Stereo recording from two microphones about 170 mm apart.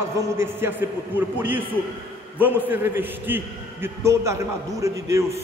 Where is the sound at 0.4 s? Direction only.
15° right (ahead or behind).